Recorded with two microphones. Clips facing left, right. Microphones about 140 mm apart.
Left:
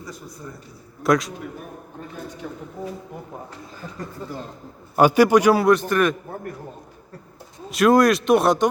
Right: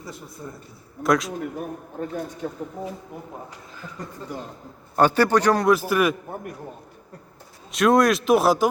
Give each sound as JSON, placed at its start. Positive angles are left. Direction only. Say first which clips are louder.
{"t": 1.0, "sound": "speech", "louder": "left 2 dB", "side_deg": 0}
{"t": 2.4, "sound": "a woman's voice", "louder": "right 3 dB", "side_deg": -40}
{"t": 4.9, "sound": "a man's voice", "louder": "left 3 dB", "side_deg": 10}
{"t": 5.7, "sound": "a man's voice", "louder": "left 1 dB", "side_deg": -5}
{"t": 7.7, "sound": "speech", "louder": "left 2 dB", "side_deg": 0}